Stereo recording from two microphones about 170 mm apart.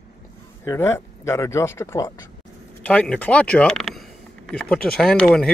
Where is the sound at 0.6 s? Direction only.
15° left (ahead or behind).